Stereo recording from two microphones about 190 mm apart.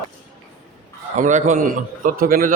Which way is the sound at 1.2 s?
40° right (ahead or behind).